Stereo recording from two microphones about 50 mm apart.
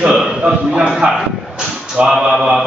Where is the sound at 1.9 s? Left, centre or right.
Centre.